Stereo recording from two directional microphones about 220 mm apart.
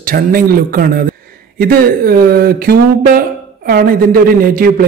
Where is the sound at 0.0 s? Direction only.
40° right (ahead or behind).